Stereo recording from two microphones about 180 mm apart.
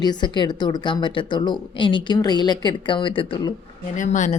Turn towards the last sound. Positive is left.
turn(degrees=45)  # may be behind; listen again after turning